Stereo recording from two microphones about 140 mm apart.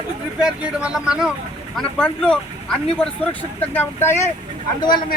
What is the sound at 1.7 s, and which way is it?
Speech, 5° left (ahead or behind).